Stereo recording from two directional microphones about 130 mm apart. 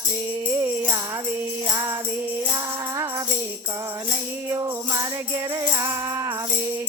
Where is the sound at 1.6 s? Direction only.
25° right (ahead or behind).